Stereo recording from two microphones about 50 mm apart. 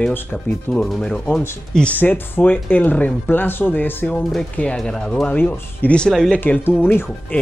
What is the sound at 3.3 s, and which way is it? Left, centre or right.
Speech, left.